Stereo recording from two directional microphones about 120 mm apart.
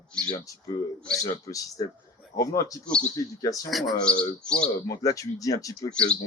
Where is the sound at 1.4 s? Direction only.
30° left (ahead or behind).